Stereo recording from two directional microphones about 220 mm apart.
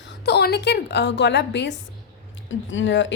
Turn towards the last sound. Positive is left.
turn(degrees=55)  # may be behind; listen again after turning